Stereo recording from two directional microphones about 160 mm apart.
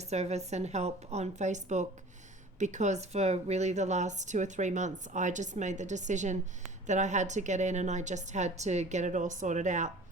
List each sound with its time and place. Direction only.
0.0 s a woman's voice: 45° right (ahead or behind)